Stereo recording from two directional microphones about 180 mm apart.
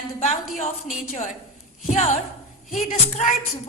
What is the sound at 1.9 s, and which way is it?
A woman's voice, 40° left (ahead or behind).